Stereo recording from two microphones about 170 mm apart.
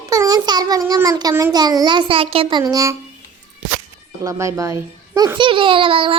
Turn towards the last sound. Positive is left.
turn(degrees=-30)  # may be behind; listen again after turning